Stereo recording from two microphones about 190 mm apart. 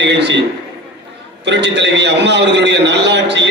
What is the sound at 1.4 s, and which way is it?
A man's voice, 65° right (ahead or behind).